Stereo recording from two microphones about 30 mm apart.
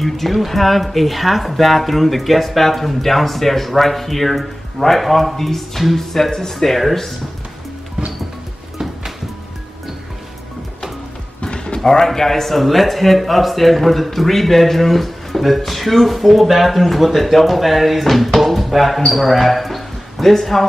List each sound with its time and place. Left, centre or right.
0.0 s speech: centre
11.4 s music: left
11.8 s speech: centre